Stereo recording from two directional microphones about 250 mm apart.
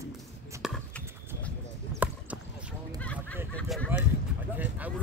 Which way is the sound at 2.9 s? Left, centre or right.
Centre.